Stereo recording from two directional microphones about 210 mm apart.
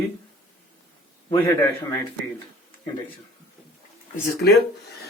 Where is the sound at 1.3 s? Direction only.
15° left (ahead or behind).